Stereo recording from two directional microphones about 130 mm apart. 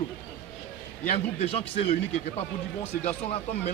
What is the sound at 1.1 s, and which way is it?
Speech, 50° left (ahead or behind).